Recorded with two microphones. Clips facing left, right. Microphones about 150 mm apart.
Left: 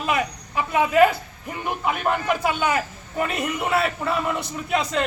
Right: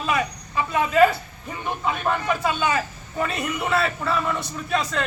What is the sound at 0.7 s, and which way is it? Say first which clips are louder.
A man's voice: left 1 dB; 15° left (ahead or behind).